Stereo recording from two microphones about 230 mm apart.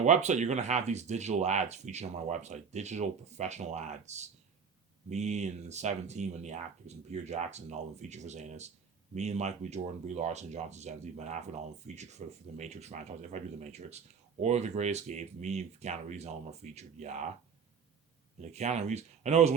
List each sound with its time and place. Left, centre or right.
0.0 s speech: right
18.4 s speech: right